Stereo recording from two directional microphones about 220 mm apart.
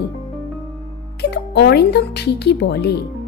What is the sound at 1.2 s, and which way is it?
A woman's voice, 50° left (ahead or behind).